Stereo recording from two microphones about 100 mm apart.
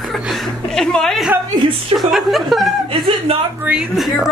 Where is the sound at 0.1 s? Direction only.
Centre (ahead or behind).